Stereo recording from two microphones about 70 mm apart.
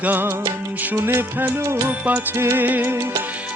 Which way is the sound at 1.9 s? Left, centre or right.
Right.